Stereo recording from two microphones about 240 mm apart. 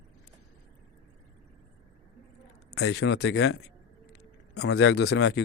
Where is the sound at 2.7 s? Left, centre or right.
Left.